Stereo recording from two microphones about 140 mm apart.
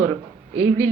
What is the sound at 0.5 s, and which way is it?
Speech, 50° right (ahead or behind).